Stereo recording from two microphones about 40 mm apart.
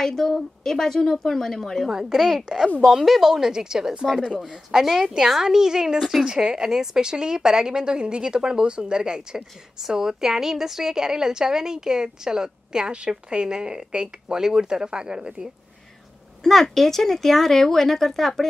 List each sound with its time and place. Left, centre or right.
0.0 s speech: centre
1.9 s a woman's voice: centre
16.4 s speech: centre